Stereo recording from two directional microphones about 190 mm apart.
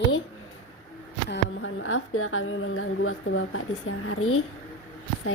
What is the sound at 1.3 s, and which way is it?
A woman's voice, 90° left.